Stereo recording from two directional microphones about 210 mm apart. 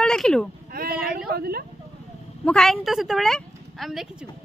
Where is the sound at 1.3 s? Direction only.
45° right (ahead or behind).